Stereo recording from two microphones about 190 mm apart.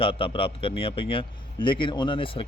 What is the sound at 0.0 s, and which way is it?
A man's voice, 30° left (ahead or behind).